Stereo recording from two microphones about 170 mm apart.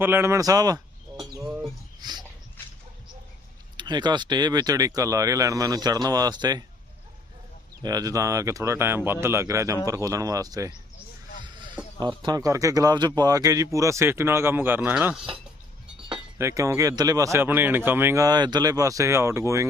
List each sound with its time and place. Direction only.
0.0 s a man's voice: 15° right (ahead or behind)
2.0 s a sound: 25° right (ahead or behind)
3.8 s a man's voice: 25° right (ahead or behind)
7.8 s a man's voice: 20° right (ahead or behind)
11.4 s a sound: 25° right (ahead or behind)
11.9 s a man's voice: 25° right (ahead or behind); by 15.2 s 5° right (ahead or behind)
16.4 s speech: 20° right (ahead or behind)